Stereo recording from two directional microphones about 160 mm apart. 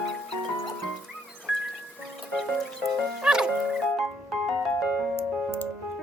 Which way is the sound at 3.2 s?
5° right (ahead or behind).